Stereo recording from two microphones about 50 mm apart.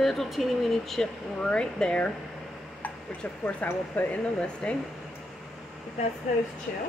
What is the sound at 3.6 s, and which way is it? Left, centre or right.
Speech, left.